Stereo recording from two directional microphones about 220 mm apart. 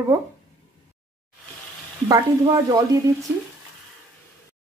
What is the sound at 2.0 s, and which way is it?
Speech, 15° right (ahead or behind).